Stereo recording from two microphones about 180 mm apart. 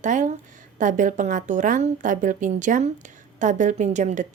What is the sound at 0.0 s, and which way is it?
A woman's voice, 45° right (ahead or behind).